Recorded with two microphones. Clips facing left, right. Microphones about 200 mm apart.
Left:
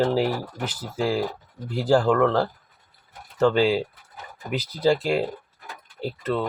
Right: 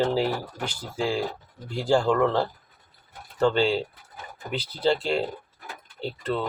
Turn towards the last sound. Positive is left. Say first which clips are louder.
# left 2 dB
turn(degrees=5)  # may be behind; listen again after turning